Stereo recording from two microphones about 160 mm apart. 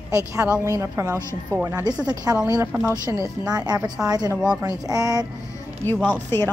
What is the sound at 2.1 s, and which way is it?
A woman's voice, 25° right (ahead or behind).